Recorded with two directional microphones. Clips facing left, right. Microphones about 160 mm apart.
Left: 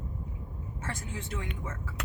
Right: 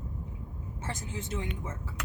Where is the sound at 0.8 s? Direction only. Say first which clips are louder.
Right 1 dB; 20° right (ahead or behind).